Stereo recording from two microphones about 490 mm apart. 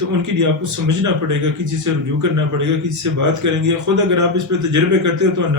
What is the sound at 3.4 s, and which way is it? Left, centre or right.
A man's voice, right.